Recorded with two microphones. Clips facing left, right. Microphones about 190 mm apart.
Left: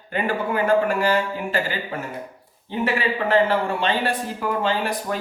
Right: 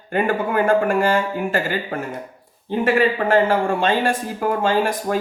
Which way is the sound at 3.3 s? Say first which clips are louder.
Right 2 dB; 45° right (ahead or behind).